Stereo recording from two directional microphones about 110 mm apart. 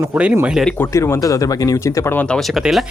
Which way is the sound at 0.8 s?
25° left (ahead or behind).